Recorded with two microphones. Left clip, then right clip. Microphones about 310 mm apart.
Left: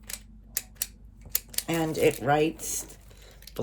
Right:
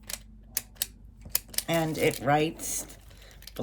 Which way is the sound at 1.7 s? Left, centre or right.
Centre.